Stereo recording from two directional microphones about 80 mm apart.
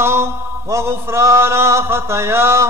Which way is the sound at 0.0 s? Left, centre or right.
Right.